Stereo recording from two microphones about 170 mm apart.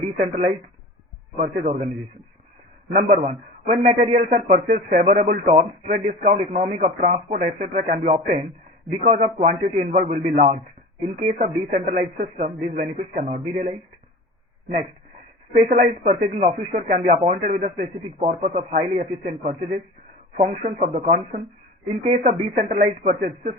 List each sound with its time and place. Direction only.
0.2 s a man's voice: 40° right (ahead or behind)
2.9 s a man's voice: 50° right (ahead or behind)
15.5 s a man's voice: 45° right (ahead or behind)